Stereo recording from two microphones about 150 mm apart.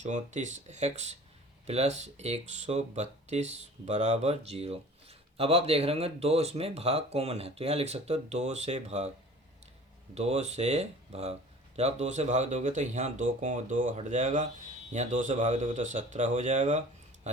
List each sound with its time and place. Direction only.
0.0 s speech: 55° right (ahead or behind)
10.2 s speech: 45° right (ahead or behind)